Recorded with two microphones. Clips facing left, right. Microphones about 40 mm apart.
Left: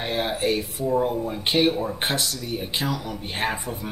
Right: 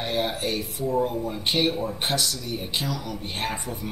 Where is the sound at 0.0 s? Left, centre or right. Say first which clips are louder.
Left 2 dB; centre.